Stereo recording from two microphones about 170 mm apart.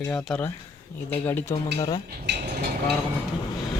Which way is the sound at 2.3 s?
90° right.